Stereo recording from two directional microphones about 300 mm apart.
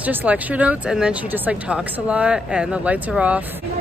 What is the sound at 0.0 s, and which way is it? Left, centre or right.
Speech, centre.